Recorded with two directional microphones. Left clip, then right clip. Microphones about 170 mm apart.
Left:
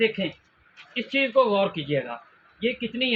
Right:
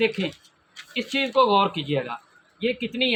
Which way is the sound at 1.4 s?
55° right (ahead or behind).